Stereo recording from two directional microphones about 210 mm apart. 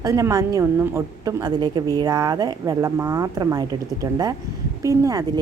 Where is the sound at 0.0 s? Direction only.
15° right (ahead or behind).